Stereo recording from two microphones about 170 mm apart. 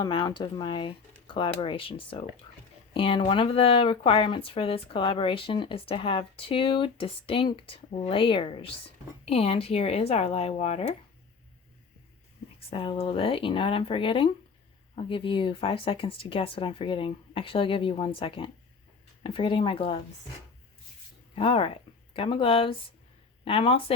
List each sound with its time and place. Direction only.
0.0 s speech: 25° left (ahead or behind)
12.5 s speech: 30° left (ahead or behind)
21.3 s speech: 35° left (ahead or behind)